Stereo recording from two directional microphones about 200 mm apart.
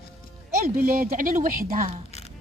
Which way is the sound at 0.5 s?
50° right (ahead or behind).